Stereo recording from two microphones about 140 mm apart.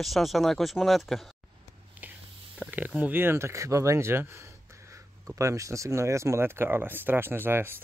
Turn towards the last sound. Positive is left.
turn(degrees=-15)  # may be behind; listen again after turning